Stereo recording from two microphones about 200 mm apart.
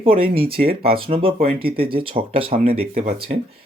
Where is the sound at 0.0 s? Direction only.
30° right (ahead or behind).